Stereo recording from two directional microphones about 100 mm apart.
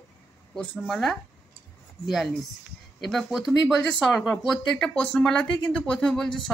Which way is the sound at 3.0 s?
Centre (ahead or behind).